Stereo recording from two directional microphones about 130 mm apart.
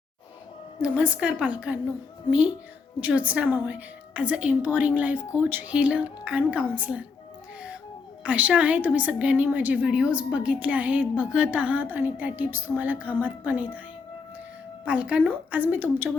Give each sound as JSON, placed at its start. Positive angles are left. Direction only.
{"t": 0.8, "sound": "a woman's voice", "side_deg": -10}
{"t": 3.0, "sound": "a woman's voice", "side_deg": -10}
{"t": 8.2, "sound": "a woman's voice", "side_deg": -10}
{"t": 14.8, "sound": "a woman's voice", "side_deg": -10}